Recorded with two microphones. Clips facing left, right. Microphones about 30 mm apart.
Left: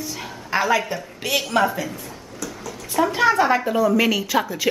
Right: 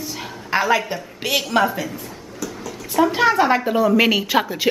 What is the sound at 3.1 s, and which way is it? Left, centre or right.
A woman's voice, centre.